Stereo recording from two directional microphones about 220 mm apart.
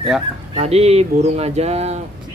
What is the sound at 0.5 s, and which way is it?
Speech, 30° right (ahead or behind).